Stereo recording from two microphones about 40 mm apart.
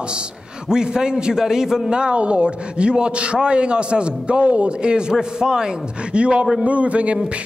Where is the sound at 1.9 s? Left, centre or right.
Right.